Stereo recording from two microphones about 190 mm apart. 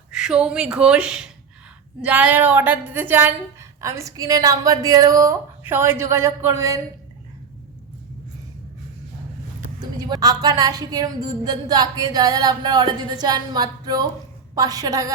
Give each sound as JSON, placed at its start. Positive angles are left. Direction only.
{"t": 0.1, "sound": "a woman's voice", "side_deg": -5}
{"t": 9.8, "sound": "a woman's voice", "side_deg": -20}